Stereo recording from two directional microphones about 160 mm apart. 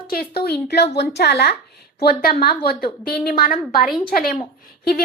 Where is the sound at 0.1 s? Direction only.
80° left.